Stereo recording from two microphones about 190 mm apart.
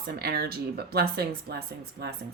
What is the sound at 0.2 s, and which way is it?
Speech, 55° right (ahead or behind).